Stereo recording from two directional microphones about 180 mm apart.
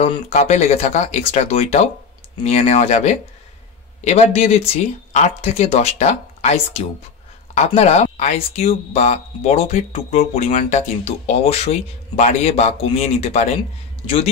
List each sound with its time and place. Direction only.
0.0 s speech: 40° left (ahead or behind)